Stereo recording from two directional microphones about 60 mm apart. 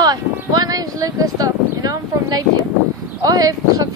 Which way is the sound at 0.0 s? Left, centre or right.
Right.